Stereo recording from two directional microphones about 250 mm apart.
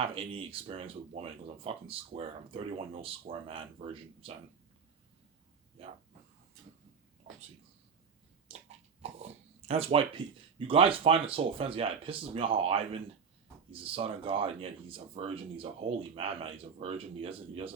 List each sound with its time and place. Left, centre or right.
0.0 s speech: right
9.0 s a sound: right
10.7 s speech: right